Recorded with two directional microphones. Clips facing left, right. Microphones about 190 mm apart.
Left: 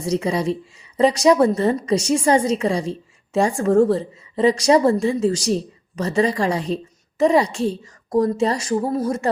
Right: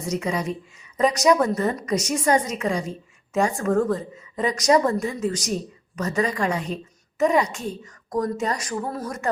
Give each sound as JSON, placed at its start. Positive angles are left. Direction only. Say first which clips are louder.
{"t": 0.0, "sound": "a woman's voice", "louder": "left 5 dB", "side_deg": 30}